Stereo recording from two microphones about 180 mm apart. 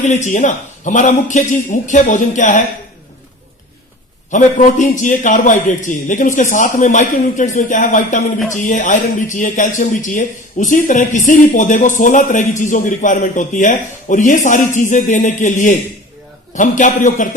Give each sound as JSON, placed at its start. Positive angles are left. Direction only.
{"t": 0.0, "sound": "speech", "side_deg": 40}
{"t": 4.3, "sound": "speech", "side_deg": 45}